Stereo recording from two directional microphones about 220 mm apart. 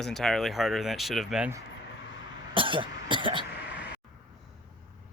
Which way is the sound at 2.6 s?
20° right (ahead or behind).